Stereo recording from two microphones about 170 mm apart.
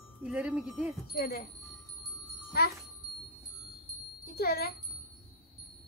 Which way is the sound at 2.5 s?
70° left (ahead or behind).